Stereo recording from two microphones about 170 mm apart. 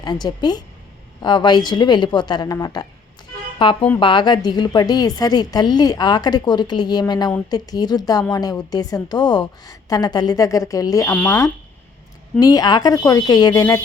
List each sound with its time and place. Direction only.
0.0 s a woman's voice: 25° left (ahead or behind)